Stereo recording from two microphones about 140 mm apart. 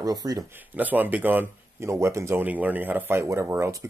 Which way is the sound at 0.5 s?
10° right (ahead or behind).